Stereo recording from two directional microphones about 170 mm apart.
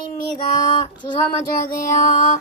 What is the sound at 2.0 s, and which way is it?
Music, 50° left (ahead or behind).